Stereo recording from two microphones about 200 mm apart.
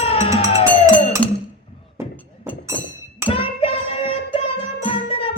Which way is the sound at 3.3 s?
25° left (ahead or behind).